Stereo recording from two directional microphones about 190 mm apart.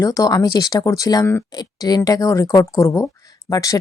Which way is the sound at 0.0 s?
20° left (ahead or behind).